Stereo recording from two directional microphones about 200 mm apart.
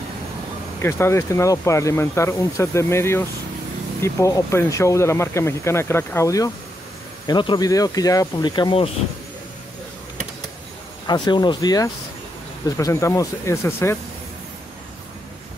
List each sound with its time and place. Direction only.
0.8 s speech: 15° left (ahead or behind)
11.1 s speech: 20° left (ahead or behind)